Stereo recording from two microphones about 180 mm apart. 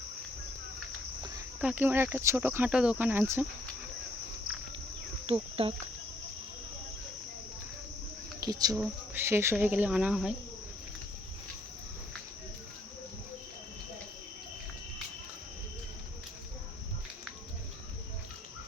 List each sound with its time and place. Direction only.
1.6 s speech: 10° right (ahead or behind)
5.2 s speech: 30° right (ahead or behind)
8.4 s speech: 20° right (ahead or behind); by 10.3 s 5° right (ahead or behind)